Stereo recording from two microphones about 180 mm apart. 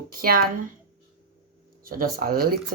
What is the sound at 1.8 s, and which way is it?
Speech, 55° right (ahead or behind).